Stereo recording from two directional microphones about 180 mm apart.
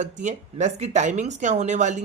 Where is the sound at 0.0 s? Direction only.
45° right (ahead or behind).